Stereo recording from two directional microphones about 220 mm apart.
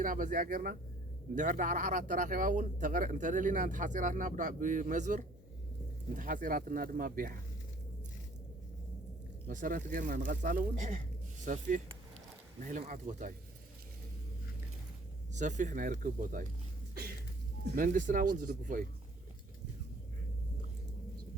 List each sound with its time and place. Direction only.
0.0 s speech: 40° right (ahead or behind)
9.5 s speech: 35° right (ahead or behind)
15.3 s speech: 35° right (ahead or behind)
17.7 s speech: 35° right (ahead or behind)